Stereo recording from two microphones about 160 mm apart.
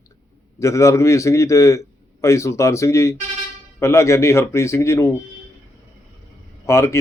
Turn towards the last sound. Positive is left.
turn(degrees=20)  # may be behind; listen again after turning